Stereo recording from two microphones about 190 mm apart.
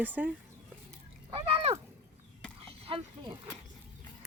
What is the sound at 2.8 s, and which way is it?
Speech, 30° right (ahead or behind).